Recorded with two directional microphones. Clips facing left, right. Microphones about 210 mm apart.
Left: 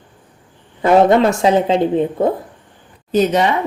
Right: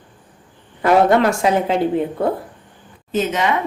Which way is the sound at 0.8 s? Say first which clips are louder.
Left 3 dB; 25° left (ahead or behind).